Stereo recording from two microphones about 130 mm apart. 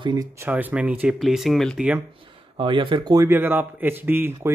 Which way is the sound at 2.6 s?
40° right (ahead or behind).